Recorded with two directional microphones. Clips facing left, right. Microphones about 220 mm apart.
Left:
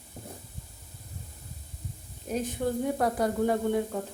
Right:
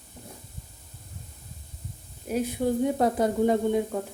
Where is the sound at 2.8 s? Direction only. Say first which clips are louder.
Right 3 dB; 20° right (ahead or behind).